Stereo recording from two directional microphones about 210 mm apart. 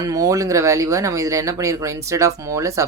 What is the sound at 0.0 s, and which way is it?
Speech, 15° right (ahead or behind).